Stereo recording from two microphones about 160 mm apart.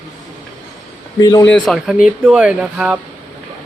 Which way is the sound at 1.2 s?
25° left (ahead or behind).